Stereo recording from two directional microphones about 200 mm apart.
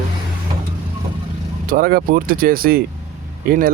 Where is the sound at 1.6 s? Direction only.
45° right (ahead or behind).